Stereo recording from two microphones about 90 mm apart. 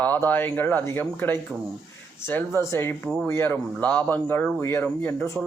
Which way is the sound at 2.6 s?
30° left (ahead or behind).